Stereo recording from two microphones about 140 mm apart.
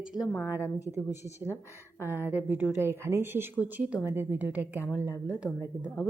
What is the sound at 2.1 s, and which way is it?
A woman's voice, 15° right (ahead or behind).